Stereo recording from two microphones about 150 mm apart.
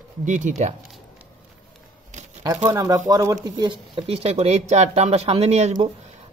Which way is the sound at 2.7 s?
20° right (ahead or behind).